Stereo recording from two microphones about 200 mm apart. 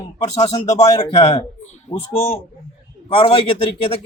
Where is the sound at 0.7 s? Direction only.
20° left (ahead or behind).